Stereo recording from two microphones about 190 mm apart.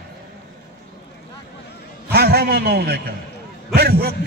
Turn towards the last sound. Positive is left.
turn(degrees=-55)  # may be behind; listen again after turning